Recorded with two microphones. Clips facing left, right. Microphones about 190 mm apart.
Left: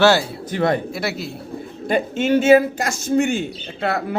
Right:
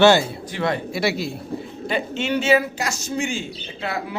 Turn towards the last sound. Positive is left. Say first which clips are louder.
# left 5 dB
turn(degrees=60)  # may be behind; listen again after turning